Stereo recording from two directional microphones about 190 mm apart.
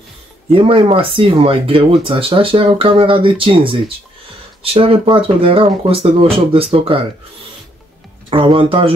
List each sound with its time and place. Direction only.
0.5 s speech: 30° right (ahead or behind)
4.7 s speech: 30° right (ahead or behind)
8.3 s speech: 25° right (ahead or behind)